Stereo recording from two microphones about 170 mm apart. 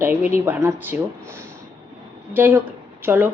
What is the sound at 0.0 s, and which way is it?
Speech, 10° right (ahead or behind).